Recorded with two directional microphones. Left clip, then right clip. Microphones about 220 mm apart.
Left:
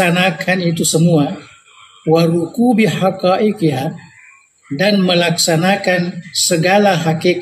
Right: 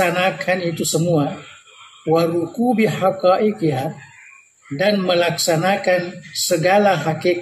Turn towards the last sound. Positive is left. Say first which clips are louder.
# left 3 dB
turn(degrees=45)  # may be behind; listen again after turning